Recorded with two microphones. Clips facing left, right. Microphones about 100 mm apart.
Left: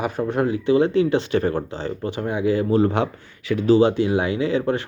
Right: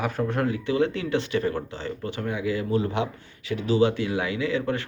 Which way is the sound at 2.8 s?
50° left (ahead or behind).